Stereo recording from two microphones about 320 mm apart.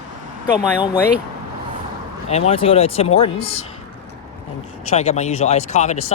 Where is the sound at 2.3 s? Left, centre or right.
Centre.